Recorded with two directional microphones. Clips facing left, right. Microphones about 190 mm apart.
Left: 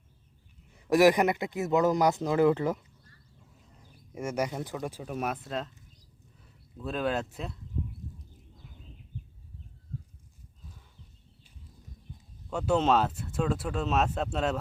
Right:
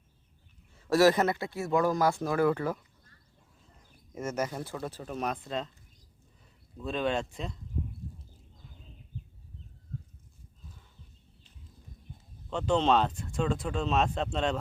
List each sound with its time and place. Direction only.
0.7 s a man's voice: 15° left (ahead or behind)
4.1 s speech: 10° left (ahead or behind)
6.7 s speech: 5° left (ahead or behind)
12.5 s speech: 10° left (ahead or behind)